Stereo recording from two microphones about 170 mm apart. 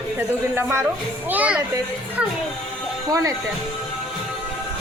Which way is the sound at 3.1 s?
20° right (ahead or behind).